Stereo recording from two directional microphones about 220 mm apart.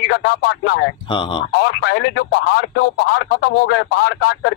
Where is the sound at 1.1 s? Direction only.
20° left (ahead or behind).